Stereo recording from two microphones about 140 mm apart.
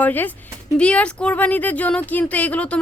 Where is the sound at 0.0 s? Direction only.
15° left (ahead or behind).